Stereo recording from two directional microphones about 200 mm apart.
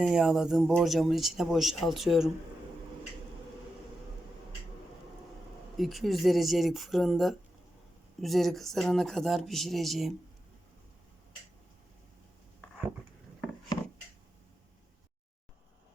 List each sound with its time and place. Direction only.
0.0 s speech: 5° right (ahead or behind)
5.7 s speech: centre (ahead or behind)